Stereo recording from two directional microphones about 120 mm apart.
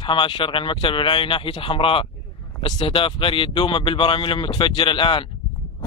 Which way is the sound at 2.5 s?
35° left (ahead or behind).